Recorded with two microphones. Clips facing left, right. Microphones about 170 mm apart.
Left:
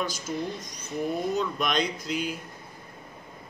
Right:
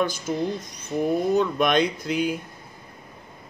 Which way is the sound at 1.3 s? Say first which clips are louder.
Right 7 dB; 55° right (ahead or behind).